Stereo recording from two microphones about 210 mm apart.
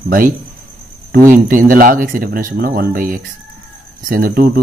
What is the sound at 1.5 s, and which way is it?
Speech, 40° right (ahead or behind).